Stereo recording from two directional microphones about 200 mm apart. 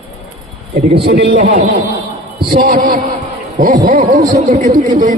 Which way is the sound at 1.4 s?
35° right (ahead or behind).